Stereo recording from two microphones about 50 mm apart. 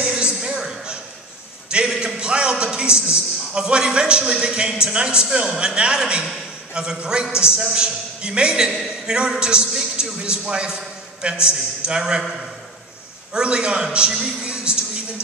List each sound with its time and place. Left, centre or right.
0.0 s a sound: centre
1.9 s a man's voice: centre
13.3 s a man's voice: centre